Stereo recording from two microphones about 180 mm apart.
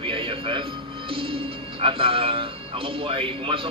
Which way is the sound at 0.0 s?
30° right (ahead or behind).